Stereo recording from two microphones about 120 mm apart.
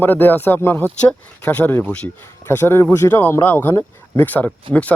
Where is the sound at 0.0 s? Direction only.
15° left (ahead or behind).